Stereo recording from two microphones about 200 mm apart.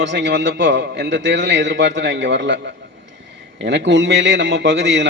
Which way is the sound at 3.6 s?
60° right (ahead or behind).